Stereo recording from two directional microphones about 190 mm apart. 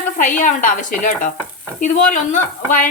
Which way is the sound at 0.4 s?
45° left (ahead or behind).